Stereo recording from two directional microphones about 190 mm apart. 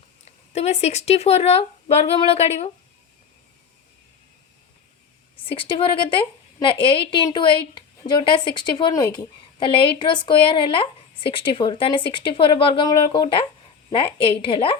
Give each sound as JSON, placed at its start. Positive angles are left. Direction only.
{"t": 0.3, "sound": "speech", "side_deg": 35}
{"t": 5.5, "sound": "a woman's voice", "side_deg": 25}